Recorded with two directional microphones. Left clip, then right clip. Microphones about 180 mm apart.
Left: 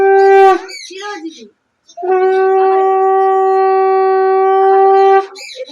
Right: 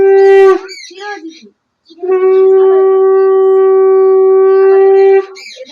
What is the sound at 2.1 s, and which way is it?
Shofar, 45° left (ahead or behind).